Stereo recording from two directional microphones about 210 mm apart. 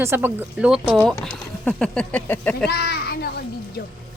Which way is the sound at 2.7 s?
50° left (ahead or behind).